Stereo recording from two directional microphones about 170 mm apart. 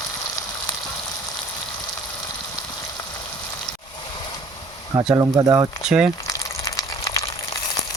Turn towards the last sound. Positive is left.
turn(degrees=20)  # may be behind; listen again after turning